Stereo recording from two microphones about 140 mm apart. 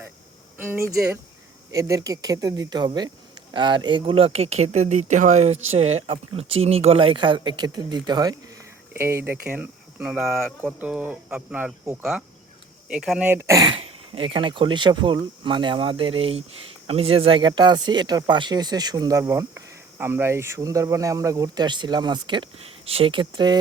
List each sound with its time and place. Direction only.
0.5 s speech: 15° right (ahead or behind)
8.9 s speech: 15° right (ahead or behind); by 10.5 s centre (ahead or behind)
10.6 s speech: 10° right (ahead or behind)
13.7 s speech: 40° right (ahead or behind)